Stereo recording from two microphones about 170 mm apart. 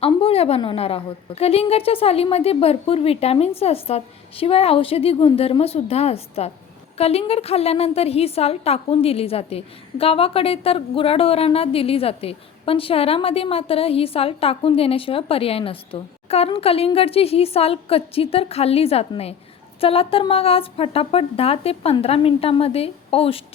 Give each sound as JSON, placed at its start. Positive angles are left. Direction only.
{"t": 0.0, "sound": "a woman's voice", "side_deg": 35}